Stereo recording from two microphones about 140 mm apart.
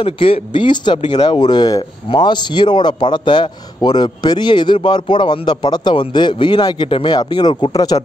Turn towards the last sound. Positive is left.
turn(degrees=25)  # may be behind; listen again after turning